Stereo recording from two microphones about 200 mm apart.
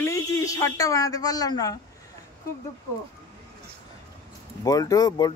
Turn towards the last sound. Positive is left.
turn(degrees=20)  # may be behind; listen again after turning